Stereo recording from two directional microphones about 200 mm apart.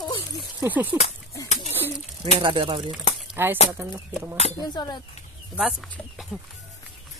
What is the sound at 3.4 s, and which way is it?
Speech, 10° right (ahead or behind).